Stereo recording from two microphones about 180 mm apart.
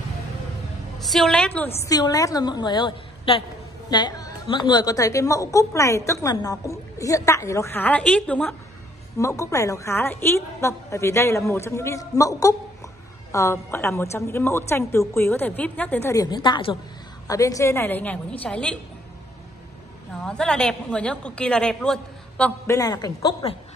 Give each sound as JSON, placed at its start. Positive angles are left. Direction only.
{"t": 0.9, "sound": "a woman's voice", "side_deg": 0}
{"t": 1.9, "sound": "a woman's voice", "side_deg": 20}
{"t": 9.2, "sound": "a woman's voice", "side_deg": 15}
{"t": 20.2, "sound": "a woman's voice", "side_deg": 5}
{"t": 22.7, "sound": "a woman's voice", "side_deg": 20}